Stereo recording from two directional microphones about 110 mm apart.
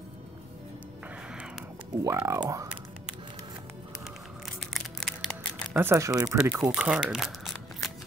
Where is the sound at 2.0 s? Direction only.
25° right (ahead or behind).